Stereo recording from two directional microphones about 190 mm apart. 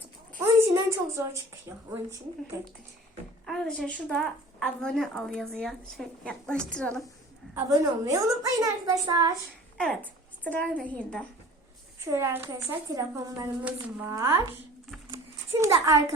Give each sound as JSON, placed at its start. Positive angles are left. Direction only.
{"t": 0.3, "sound": "a woman's voice", "side_deg": -15}
{"t": 3.4, "sound": "a woman's voice", "side_deg": 0}
{"t": 7.5, "sound": "a woman's voice", "side_deg": -15}
{"t": 9.7, "sound": "a woman's voice", "side_deg": 5}
{"t": 12.1, "sound": "a woman's voice", "side_deg": -15}
{"t": 15.5, "sound": "a woman's voice", "side_deg": -15}